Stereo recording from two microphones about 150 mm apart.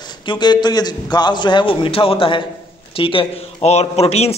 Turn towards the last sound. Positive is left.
turn(degrees=45)  # may be behind; listen again after turning